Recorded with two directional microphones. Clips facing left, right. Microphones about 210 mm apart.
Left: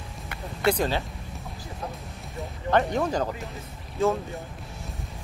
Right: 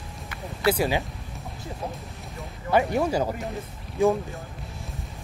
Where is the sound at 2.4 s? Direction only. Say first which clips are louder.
Right 1 dB; 10° right (ahead or behind).